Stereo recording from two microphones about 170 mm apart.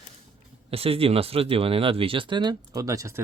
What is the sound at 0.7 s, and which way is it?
Speech, 35° right (ahead or behind).